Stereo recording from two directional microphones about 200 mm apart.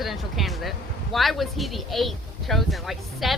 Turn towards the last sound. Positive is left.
turn(degrees=0)  # may be behind; listen again after turning